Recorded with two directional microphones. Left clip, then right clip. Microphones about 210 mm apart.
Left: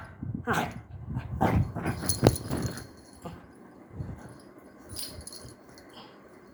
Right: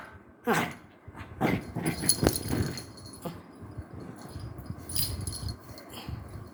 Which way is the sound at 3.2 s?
25° right (ahead or behind).